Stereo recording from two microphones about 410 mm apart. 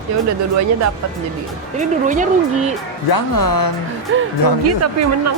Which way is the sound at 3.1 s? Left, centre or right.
Left.